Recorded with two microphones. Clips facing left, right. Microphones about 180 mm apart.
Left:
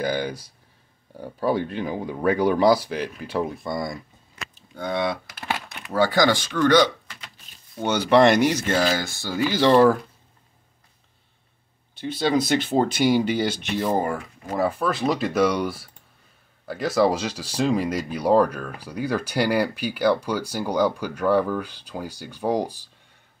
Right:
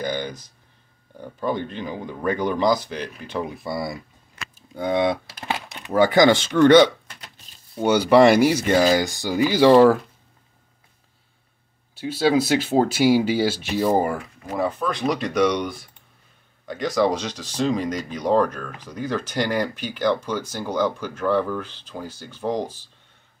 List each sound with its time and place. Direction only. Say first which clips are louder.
0.0 s speech: left 2 dB; 10° left (ahead or behind)
4.6 s speech: right 4 dB; 15° right (ahead or behind)
7.8 s speech: right 3 dB; 10° right (ahead or behind)
12.0 s speech: right 3 dB; 5° right (ahead or behind)
14.5 s speech: left 1 dB; 5° left (ahead or behind)